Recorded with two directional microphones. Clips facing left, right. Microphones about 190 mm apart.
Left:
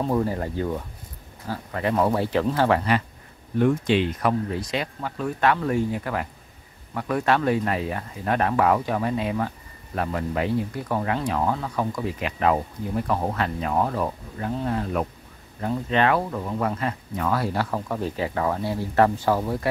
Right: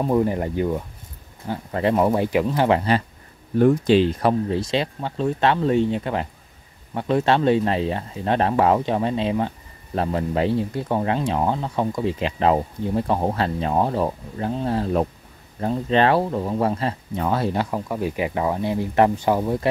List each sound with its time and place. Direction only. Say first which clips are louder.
0.0 s speech: right 4 dB; 15° right (ahead or behind)
3.5 s speech: right 5 dB; 35° right (ahead or behind); by 19.7 s 20° right (ahead or behind)